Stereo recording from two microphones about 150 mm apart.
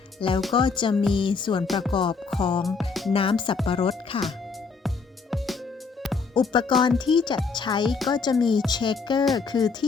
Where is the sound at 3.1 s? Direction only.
35° left (ahead or behind).